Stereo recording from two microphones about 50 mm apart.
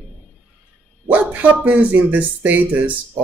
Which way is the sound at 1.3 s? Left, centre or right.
Right.